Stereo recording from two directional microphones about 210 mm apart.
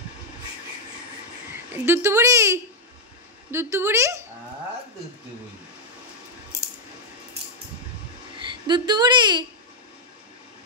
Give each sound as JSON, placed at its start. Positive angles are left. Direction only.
{"t": 1.7, "sound": "speech", "side_deg": -10}
{"t": 8.4, "sound": "a woman's voice", "side_deg": -20}